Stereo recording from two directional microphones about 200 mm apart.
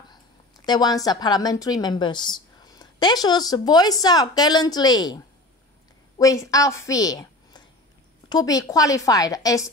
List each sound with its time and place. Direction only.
0.7 s a woman's voice: 20° left (ahead or behind)